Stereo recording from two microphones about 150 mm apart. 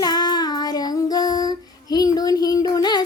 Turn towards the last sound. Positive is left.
turn(degrees=25)  # may be behind; listen again after turning